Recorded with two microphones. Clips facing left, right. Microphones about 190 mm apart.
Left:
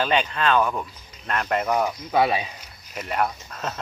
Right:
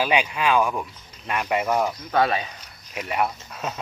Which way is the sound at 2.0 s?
10° left (ahead or behind).